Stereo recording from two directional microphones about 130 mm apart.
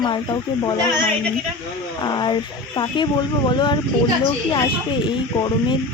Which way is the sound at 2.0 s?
35° left (ahead or behind).